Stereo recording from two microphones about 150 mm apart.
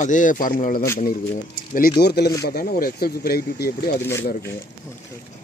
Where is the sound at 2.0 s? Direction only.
90° left.